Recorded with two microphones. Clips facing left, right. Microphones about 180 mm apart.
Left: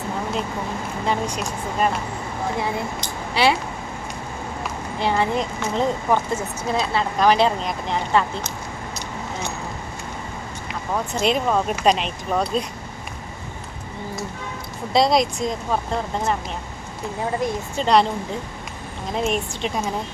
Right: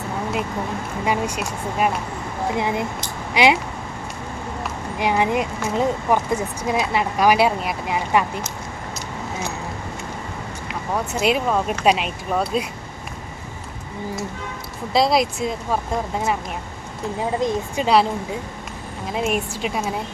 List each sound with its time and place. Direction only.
1.0 s speech: 10° right (ahead or behind)
4.9 s speech: 15° right (ahead or behind)
11.1 s speech: 5° right (ahead or behind)
14.9 s speech: 5° right (ahead or behind)
17.4 s speech: 10° right (ahead or behind)